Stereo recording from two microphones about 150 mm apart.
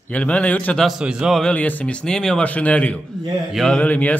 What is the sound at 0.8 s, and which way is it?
Speech, 5° right (ahead or behind).